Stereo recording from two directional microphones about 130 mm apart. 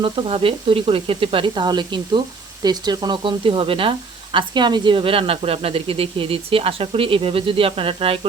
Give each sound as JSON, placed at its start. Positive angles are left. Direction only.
{"t": 0.0, "sound": "speech", "side_deg": -45}